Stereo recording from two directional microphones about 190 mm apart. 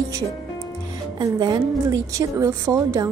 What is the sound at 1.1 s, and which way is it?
A woman's voice, 20° right (ahead or behind).